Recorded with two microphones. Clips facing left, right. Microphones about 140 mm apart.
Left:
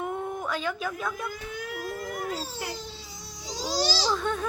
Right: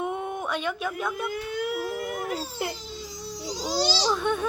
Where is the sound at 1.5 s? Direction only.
70° right (ahead or behind).